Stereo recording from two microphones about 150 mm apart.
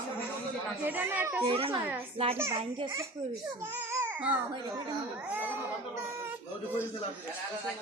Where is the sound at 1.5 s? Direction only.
35° right (ahead or behind).